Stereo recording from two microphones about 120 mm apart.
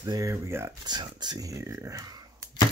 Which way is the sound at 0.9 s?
35° right (ahead or behind).